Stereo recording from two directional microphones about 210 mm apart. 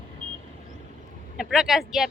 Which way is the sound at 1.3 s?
Centre (ahead or behind).